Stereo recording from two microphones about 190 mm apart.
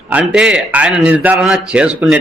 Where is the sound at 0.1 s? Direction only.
5° right (ahead or behind).